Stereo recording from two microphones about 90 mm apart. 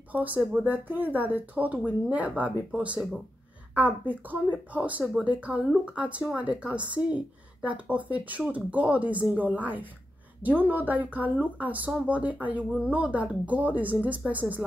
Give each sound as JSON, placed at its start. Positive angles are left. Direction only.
{"t": 0.1, "sound": "speech", "side_deg": -20}